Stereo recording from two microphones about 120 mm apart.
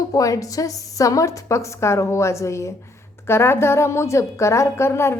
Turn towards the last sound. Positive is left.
turn(degrees=20)  # may be behind; listen again after turning